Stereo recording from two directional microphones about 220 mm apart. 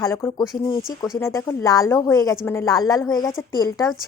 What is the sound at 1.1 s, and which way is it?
A woman's voice, 10° left (ahead or behind).